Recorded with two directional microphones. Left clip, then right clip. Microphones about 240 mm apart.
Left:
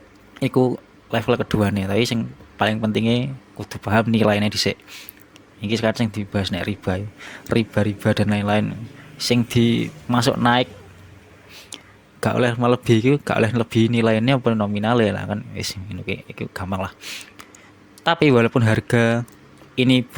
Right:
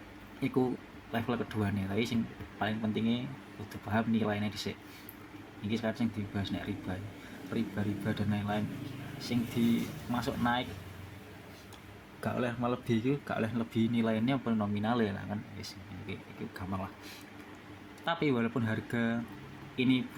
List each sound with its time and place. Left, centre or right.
0.3 s a man's voice: left
5.7 s a man's voice: left
12.2 s a man's voice: left